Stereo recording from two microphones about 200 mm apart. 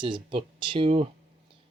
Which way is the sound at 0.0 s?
25° right (ahead or behind).